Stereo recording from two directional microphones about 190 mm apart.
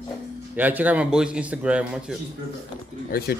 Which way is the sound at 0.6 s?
10° right (ahead or behind).